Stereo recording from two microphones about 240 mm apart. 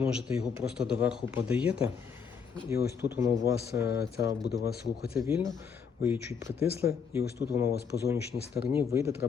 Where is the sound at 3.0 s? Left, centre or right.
Centre.